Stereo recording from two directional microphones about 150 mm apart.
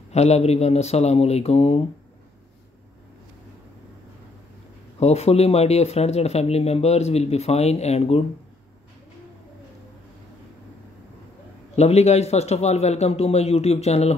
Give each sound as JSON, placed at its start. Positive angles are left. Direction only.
{"t": 0.1, "sound": "speech", "side_deg": 45}
{"t": 5.0, "sound": "speech", "side_deg": 45}
{"t": 11.7, "sound": "speech", "side_deg": 45}